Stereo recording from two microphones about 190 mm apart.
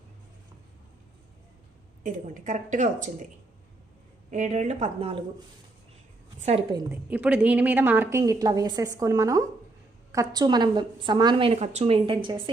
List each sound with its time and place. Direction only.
2.0 s speech: 40° right (ahead or behind)
4.3 s speech: 40° right (ahead or behind)
6.4 s speech: 35° right (ahead or behind)
6.9 s a woman's voice: 10° right (ahead or behind); by 12.4 s 25° right (ahead or behind)